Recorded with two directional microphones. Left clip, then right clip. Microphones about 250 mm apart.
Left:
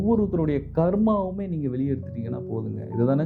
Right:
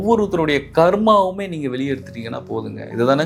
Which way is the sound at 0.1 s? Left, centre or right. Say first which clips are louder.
Right 8 dB; centre.